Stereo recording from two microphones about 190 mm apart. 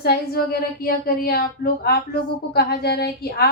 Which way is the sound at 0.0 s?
55° left (ahead or behind).